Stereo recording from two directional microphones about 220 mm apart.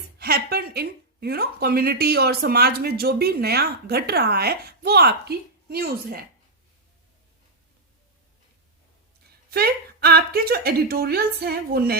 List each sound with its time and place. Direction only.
0.2 s a woman's voice: 45° right (ahead or behind)
9.5 s a woman's voice: 45° right (ahead or behind)